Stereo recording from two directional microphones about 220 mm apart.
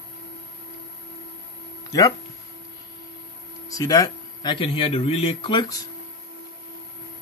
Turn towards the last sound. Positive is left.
turn(degrees=20)  # may be behind; listen again after turning